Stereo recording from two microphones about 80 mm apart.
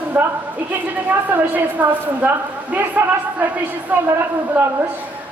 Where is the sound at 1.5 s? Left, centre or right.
Right.